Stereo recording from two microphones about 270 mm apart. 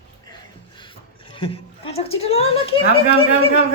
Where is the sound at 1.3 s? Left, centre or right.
Centre.